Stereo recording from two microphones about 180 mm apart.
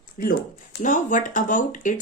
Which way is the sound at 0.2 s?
50° left (ahead or behind).